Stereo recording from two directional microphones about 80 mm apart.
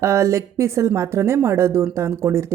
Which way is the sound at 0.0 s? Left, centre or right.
Right.